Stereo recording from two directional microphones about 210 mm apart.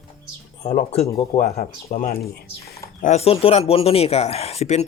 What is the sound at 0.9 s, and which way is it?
Speech, 30° left (ahead or behind).